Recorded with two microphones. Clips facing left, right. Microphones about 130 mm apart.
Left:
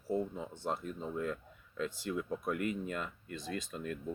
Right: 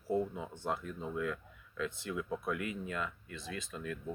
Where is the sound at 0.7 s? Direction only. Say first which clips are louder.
Even; 35° left (ahead or behind).